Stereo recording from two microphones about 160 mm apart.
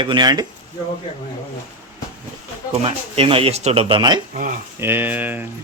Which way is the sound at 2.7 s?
40° right (ahead or behind).